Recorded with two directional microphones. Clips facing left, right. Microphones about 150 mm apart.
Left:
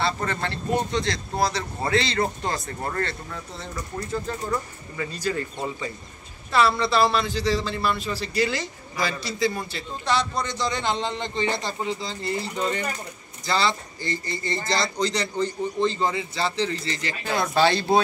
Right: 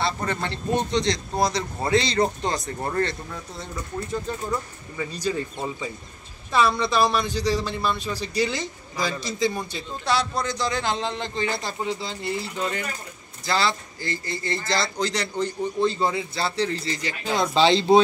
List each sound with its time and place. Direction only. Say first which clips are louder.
0.0 s a man's voice: even; 15° right (ahead or behind)
4.1 s a man's voice: left 1 dB; 10° right (ahead or behind)
6.8 s a man's voice: even; 15° right (ahead or behind)